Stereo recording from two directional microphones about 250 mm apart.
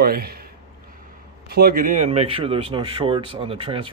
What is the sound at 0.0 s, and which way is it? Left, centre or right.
Speech, right.